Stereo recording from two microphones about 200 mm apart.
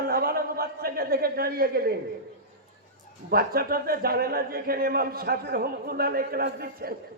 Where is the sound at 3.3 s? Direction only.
50° right (ahead or behind).